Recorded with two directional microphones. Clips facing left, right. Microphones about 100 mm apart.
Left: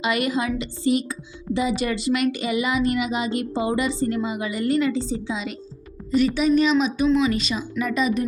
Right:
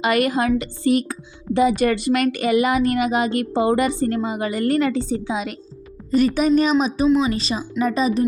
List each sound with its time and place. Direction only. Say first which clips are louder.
0.0 s a woman's voice: right 4 dB; 55° right (ahead or behind); by 8.3 s 35° right (ahead or behind)